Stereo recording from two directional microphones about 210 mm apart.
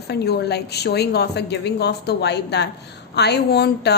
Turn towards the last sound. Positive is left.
turn(degrees=50)  # may be behind; listen again after turning